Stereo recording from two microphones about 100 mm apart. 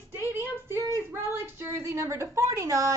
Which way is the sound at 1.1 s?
25° right (ahead or behind).